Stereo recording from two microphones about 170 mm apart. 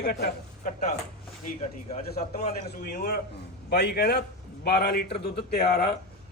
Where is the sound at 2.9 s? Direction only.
70° left (ahead or behind).